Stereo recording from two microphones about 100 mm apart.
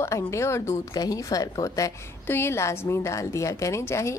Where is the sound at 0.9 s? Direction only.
40° left (ahead or behind).